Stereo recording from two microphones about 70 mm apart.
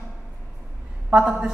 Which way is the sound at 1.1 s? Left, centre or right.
Centre.